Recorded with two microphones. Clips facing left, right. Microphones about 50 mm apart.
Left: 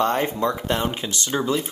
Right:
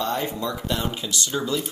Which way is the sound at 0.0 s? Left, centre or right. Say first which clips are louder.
Left 5 dB; left.